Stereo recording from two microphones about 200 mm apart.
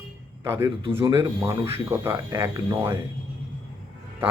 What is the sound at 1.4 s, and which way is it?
Speech, 10° right (ahead or behind).